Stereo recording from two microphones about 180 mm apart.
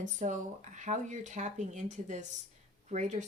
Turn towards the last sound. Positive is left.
turn(degrees=-40)  # may be behind; listen again after turning